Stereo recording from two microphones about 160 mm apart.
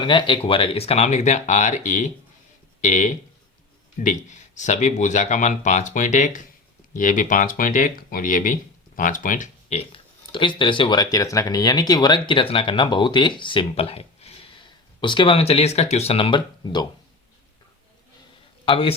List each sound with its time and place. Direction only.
0.0 s speech: 30° left (ahead or behind)
18.6 s a man's voice: 35° left (ahead or behind)